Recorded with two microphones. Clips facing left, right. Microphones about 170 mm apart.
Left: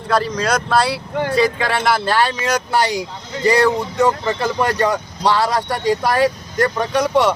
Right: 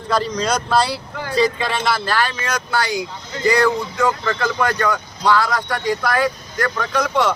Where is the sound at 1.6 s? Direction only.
15° left (ahead or behind).